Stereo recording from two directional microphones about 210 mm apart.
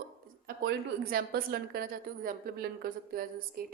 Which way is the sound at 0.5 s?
40° right (ahead or behind).